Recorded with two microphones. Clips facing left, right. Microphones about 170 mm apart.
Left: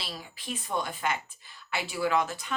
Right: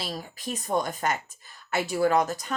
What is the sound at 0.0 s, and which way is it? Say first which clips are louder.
Speech: right 6 dB; 45° right (ahead or behind).